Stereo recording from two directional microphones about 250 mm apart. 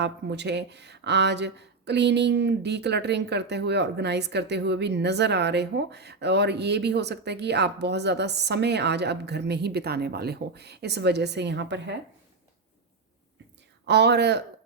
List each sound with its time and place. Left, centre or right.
0.0 s speech: right
13.8 s speech: right